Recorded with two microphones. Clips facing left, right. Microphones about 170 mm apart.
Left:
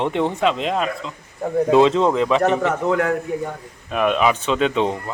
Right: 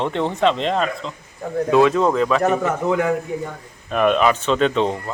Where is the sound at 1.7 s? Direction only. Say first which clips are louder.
Even; 25° left (ahead or behind).